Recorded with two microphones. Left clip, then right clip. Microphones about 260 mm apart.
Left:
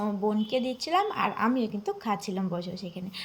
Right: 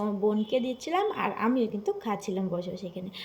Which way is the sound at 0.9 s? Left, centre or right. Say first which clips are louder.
Left 2 dB; left.